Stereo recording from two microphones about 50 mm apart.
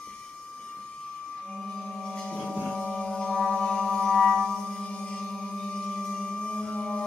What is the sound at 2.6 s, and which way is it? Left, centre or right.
Music, centre.